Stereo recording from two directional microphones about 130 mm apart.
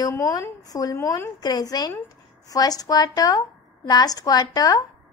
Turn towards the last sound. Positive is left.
turn(degrees=30)  # may be behind; listen again after turning